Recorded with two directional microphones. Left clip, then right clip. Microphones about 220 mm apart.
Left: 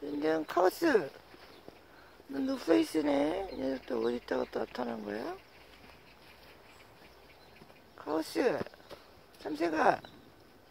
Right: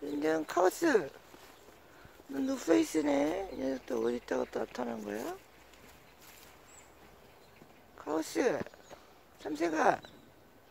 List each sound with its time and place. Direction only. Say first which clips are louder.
0.0 s speech: even; 5° right (ahead or behind)
2.3 s speech: even; 5° right (ahead or behind)
8.0 s speech: left 1 dB; 5° right (ahead or behind)